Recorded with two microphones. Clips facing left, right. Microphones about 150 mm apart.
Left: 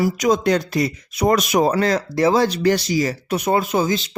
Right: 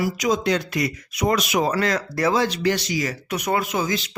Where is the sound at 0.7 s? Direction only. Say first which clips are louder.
Left 4 dB; 35° left (ahead or behind).